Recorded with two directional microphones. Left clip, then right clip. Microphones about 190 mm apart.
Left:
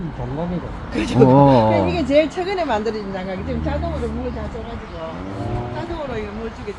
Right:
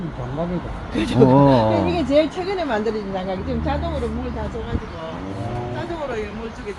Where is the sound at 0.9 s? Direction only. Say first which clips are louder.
Even; centre (ahead or behind).